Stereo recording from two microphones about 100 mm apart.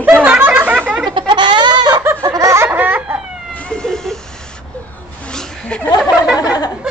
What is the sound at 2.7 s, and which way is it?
Speech, 15° right (ahead or behind).